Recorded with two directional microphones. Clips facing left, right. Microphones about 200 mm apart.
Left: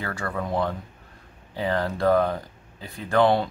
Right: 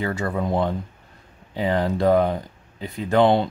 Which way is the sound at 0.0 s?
20° right (ahead or behind).